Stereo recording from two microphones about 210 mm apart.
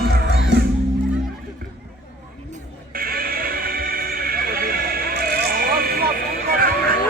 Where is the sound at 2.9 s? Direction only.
45° right (ahead or behind).